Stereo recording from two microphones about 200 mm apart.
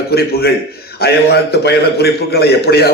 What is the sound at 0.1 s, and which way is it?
A man's voice, 50° left (ahead or behind).